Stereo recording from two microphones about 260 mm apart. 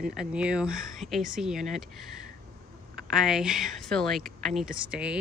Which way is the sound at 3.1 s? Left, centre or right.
Centre.